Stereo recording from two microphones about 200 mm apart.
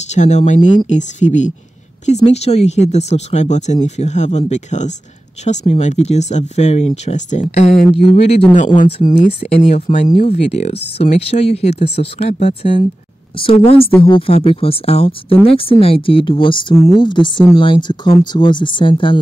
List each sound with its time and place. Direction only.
0.1 s speech: 35° left (ahead or behind)